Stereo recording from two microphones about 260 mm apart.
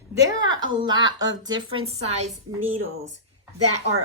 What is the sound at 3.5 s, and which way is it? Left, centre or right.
Speech, right.